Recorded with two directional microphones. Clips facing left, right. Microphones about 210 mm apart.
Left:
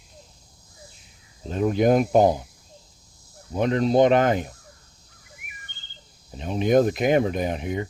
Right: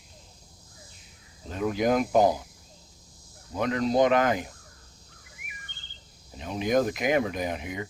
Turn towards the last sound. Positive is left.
turn(degrees=30)  # may be behind; listen again after turning